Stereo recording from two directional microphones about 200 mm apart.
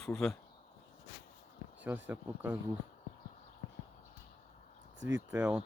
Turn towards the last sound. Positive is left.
turn(degrees=-5)  # may be behind; listen again after turning